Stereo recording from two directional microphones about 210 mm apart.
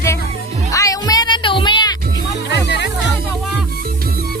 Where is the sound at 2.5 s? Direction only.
55° left (ahead or behind).